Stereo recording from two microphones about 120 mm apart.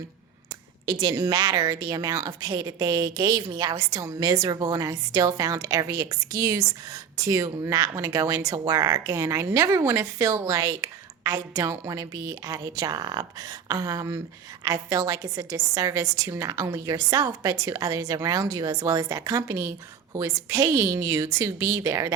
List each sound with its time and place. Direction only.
0.9 s a woman's voice: 35° right (ahead or behind)